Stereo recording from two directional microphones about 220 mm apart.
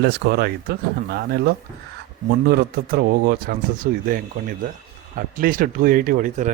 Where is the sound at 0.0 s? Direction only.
50° right (ahead or behind).